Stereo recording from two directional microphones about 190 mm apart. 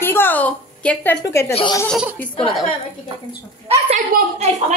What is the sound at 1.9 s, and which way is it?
Speech, 5° right (ahead or behind).